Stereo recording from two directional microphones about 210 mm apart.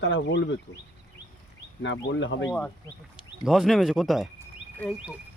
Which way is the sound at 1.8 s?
60° left (ahead or behind).